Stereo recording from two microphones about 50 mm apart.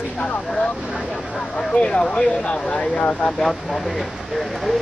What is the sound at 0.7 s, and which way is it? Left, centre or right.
Speech, centre.